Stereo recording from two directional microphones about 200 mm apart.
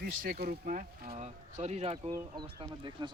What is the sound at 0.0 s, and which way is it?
Speech, 45° right (ahead or behind).